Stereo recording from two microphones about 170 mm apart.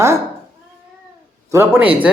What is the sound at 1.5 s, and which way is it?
Speech, 10° right (ahead or behind).